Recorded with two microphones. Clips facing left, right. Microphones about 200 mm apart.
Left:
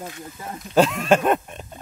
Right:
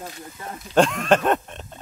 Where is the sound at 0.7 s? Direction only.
5° left (ahead or behind).